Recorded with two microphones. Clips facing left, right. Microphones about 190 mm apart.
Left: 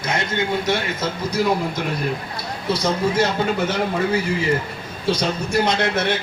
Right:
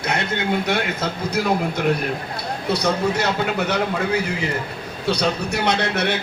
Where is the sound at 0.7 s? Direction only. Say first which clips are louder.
Even; 60° right (ahead or behind).